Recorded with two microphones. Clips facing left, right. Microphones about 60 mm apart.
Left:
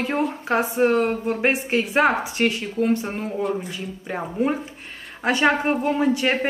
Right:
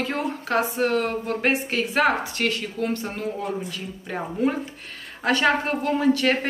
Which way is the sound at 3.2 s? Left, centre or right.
Centre.